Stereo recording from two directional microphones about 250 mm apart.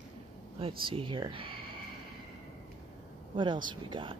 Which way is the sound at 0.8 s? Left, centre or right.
Centre.